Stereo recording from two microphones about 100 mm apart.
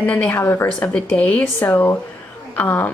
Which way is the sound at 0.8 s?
10° left (ahead or behind).